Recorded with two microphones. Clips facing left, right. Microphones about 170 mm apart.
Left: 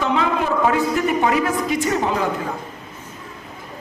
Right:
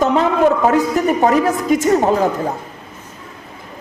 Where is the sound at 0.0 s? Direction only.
45° right (ahead or behind).